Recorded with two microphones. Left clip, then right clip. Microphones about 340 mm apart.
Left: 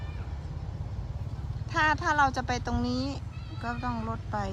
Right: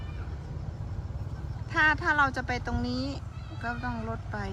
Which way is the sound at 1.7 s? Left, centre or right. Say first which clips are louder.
Right 1 dB; centre.